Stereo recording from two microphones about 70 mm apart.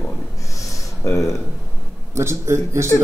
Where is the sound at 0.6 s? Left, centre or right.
Left.